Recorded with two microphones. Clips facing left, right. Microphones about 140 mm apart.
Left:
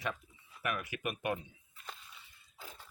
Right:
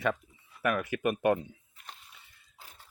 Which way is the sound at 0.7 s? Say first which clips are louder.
Right 9 dB; 55° right (ahead or behind).